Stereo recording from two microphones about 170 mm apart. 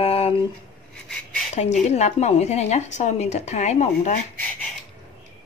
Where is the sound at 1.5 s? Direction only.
40° left (ahead or behind).